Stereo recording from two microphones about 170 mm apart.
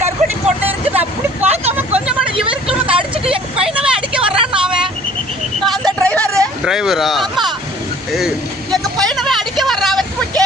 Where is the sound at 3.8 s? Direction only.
5° right (ahead or behind).